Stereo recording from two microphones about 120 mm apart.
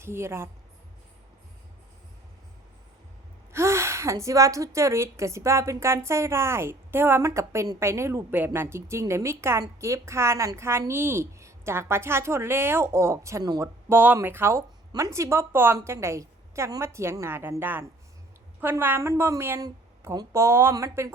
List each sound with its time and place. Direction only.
0.0 s a woman's voice: 20° right (ahead or behind)
3.5 s a woman's voice: 25° right (ahead or behind)
13.9 s a woman's voice: 15° right (ahead or behind)